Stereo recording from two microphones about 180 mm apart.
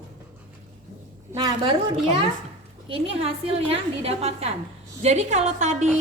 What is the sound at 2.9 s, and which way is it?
A woman's voice, 30° right (ahead or behind).